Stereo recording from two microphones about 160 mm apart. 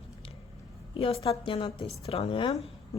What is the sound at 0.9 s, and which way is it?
A woman's voice, 35° left (ahead or behind).